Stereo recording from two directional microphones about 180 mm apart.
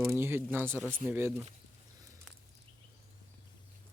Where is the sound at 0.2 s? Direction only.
15° right (ahead or behind).